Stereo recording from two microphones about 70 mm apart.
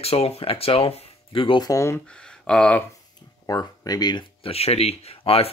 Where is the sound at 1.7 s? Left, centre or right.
Left.